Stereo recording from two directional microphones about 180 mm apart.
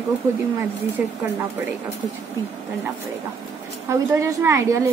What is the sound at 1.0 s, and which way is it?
Child singing, 10° right (ahead or behind).